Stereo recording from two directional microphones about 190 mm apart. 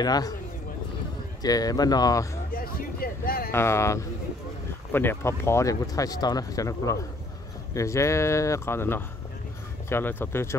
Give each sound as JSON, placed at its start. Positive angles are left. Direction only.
{"t": 0.0, "sound": "speech", "side_deg": 20}
{"t": 1.4, "sound": "speech", "side_deg": 20}
{"t": 2.5, "sound": "speech", "side_deg": 50}
{"t": 3.5, "sound": "speech", "side_deg": 15}